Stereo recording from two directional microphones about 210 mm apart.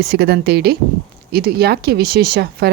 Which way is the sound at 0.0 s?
50° right (ahead or behind).